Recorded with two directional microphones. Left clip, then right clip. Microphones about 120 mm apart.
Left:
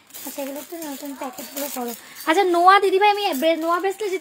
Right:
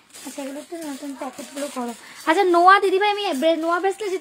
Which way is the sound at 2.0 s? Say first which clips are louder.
Even; 25° right (ahead or behind).